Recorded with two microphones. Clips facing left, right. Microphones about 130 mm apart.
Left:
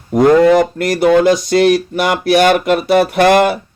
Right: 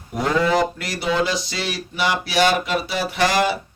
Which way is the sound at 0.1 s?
50° left (ahead or behind).